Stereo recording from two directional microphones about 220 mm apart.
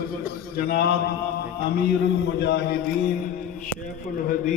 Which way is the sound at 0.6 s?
45° left (ahead or behind).